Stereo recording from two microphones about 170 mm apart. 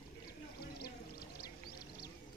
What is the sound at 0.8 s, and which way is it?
Music, 65° left (ahead or behind).